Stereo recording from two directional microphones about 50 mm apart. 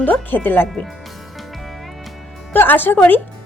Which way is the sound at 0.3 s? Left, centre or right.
Left.